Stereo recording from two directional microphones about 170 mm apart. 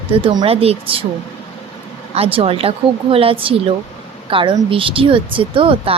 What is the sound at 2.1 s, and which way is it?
A woman's voice, 35° right (ahead or behind).